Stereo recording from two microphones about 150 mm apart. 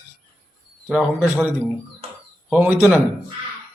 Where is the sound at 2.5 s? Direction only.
10° right (ahead or behind).